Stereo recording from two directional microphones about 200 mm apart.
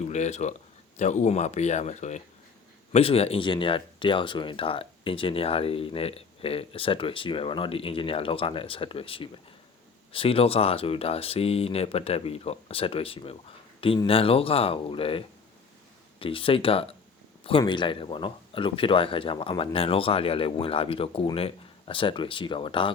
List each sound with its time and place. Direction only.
0.0 s a man's voice: 35° left (ahead or behind)